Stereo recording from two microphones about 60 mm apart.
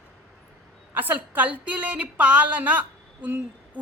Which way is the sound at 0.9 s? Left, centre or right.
Right.